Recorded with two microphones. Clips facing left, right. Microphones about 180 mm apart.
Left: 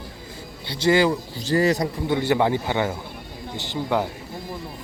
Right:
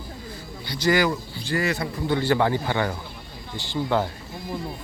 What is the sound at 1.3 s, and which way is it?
Speech, 40° left (ahead or behind).